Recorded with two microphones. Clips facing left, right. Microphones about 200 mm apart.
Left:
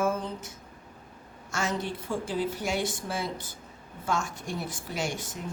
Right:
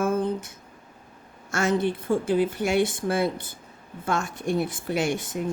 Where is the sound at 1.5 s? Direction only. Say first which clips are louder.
Right 7 dB; 55° right (ahead or behind).